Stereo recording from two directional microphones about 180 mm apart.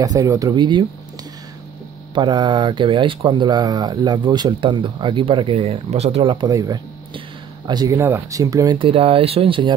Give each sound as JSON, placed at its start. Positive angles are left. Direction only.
{"t": 0.0, "sound": "speech", "side_deg": -20}
{"t": 2.1, "sound": "speech", "side_deg": -25}